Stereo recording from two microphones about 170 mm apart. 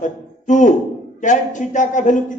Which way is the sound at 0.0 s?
45° left (ahead or behind).